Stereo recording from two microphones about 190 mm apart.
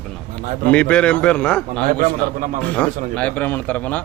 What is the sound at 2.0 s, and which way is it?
Speech, 45° right (ahead or behind).